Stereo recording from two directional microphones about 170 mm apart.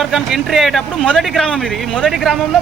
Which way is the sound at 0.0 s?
Centre (ahead or behind).